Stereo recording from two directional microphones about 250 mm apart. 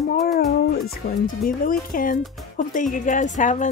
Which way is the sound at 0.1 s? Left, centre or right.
Left.